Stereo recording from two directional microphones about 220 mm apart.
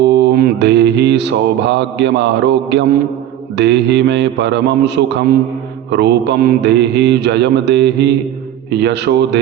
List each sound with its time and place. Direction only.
0.0 s mantra: 50° right (ahead or behind)